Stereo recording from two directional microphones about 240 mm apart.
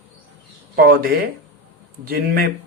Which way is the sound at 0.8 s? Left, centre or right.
Right.